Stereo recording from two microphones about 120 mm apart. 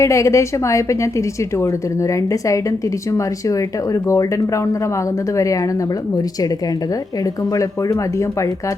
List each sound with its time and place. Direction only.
0.0 s a woman's voice: 25° left (ahead or behind)
7.5 s a woman's voice: 25° left (ahead or behind)